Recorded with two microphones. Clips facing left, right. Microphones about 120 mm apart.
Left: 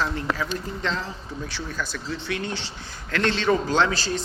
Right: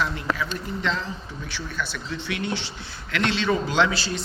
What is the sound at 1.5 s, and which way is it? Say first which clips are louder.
A man's voice: right 2 dB; 35° left (ahead or behind).